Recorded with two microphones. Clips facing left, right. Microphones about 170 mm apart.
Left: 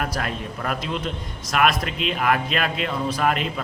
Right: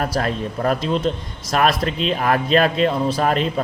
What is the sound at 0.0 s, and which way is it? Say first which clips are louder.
A man's voice: right 5 dB; 35° right (ahead or behind).